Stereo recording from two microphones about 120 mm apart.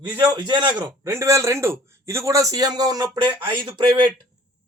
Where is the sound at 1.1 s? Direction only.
25° right (ahead or behind); by 3.9 s 40° right (ahead or behind).